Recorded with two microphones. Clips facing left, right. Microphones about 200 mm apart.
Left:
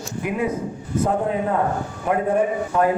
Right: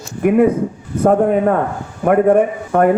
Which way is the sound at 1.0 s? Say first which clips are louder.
Right 9 dB; 60° right (ahead or behind).